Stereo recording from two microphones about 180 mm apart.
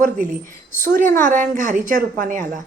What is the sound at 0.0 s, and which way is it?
A woman's voice, 45° right (ahead or behind).